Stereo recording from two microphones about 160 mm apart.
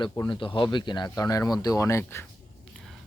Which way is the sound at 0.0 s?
30° left (ahead or behind).